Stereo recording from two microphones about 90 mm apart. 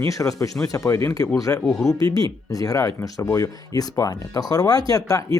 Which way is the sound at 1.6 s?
5° left (ahead or behind).